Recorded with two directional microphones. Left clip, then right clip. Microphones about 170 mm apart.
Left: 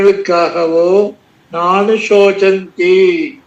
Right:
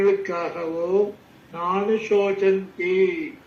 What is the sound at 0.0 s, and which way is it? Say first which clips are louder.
A man's voice: left 11 dB; 50° left (ahead or behind).